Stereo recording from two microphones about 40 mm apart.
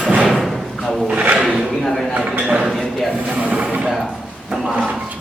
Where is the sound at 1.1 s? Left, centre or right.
Right.